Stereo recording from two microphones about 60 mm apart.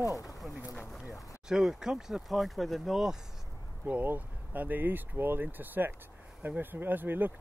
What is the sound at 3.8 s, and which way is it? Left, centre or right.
Speech, right.